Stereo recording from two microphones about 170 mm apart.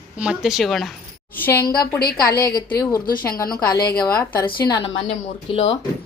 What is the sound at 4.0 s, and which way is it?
Speech, 25° left (ahead or behind).